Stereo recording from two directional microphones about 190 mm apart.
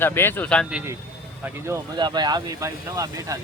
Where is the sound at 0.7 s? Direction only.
15° right (ahead or behind).